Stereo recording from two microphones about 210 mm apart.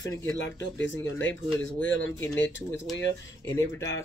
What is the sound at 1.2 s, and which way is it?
Speech, 65° left (ahead or behind).